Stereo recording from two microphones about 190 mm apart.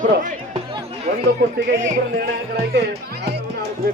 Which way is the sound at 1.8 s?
55° right (ahead or behind).